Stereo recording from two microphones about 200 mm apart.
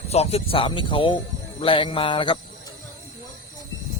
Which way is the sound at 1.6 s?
25° left (ahead or behind).